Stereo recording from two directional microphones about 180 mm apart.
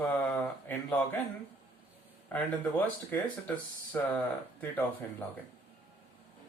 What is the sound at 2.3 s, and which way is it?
Speech, 10° left (ahead or behind).